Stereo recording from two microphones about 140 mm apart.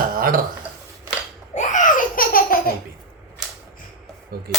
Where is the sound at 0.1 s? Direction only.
90° right.